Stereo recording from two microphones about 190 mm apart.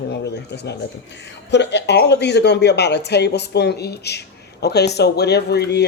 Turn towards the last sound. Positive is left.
turn(degrees=60)  # may be behind; listen again after turning